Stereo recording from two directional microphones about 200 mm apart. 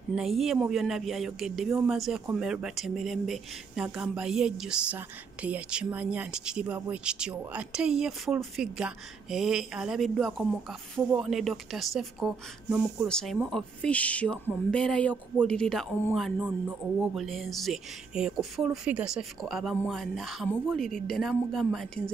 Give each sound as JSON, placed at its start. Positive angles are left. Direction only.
{"t": 0.1, "sound": "speech", "side_deg": 0}